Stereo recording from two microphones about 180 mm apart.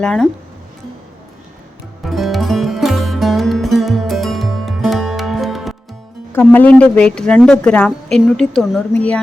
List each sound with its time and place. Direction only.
0.0 s a woman's voice: 5° left (ahead or behind)
2.0 s music: centre (ahead or behind)
6.5 s a woman's voice: 10° left (ahead or behind)